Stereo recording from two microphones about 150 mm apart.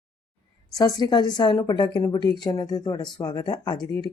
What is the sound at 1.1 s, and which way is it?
Speech, 30° left (ahead or behind).